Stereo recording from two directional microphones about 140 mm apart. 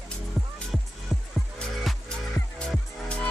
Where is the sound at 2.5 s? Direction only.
5° left (ahead or behind).